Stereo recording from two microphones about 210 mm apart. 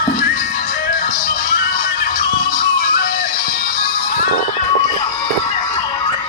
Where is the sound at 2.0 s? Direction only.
40° left (ahead or behind).